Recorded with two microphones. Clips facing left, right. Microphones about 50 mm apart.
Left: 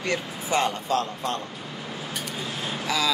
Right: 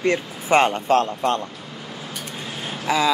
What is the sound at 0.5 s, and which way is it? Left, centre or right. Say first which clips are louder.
Speech: right 7 dB; right.